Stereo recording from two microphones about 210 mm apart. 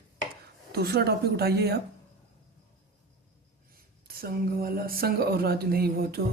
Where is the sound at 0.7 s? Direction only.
50° right (ahead or behind).